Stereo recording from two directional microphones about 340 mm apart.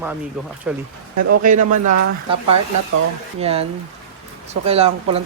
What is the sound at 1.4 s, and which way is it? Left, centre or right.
Speech, right.